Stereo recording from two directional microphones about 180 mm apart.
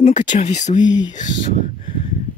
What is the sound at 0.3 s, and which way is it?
Speech, 40° left (ahead or behind).